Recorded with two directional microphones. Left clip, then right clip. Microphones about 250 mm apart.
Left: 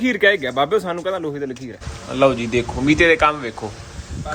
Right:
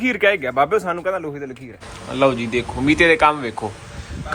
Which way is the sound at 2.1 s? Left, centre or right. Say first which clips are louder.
Left 1 dB; centre.